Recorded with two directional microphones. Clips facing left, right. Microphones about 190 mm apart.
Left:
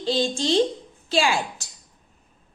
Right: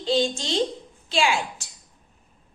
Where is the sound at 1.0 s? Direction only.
40° left (ahead or behind).